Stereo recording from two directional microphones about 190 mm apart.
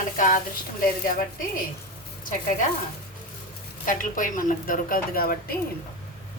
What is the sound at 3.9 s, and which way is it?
A woman's voice, 45° left (ahead or behind).